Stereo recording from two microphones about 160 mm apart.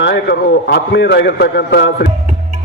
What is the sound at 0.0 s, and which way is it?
A man's voice, 90° left.